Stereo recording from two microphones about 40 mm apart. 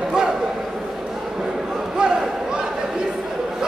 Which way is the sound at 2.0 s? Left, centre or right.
Right.